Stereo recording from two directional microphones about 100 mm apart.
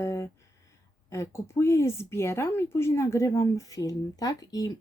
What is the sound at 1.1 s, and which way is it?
Speech, 30° left (ahead or behind).